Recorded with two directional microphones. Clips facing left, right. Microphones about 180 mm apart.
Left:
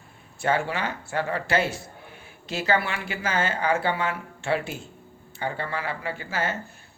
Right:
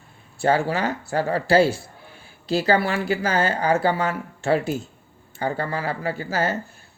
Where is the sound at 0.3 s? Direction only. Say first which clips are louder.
Right 5 dB; 35° right (ahead or behind).